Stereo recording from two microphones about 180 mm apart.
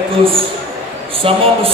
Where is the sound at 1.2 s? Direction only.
30° right (ahead or behind).